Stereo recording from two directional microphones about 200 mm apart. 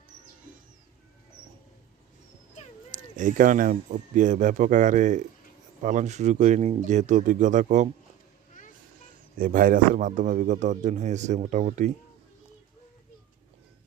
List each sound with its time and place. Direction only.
2.9 s speech: 40° right (ahead or behind)
9.4 s speech: 45° right (ahead or behind)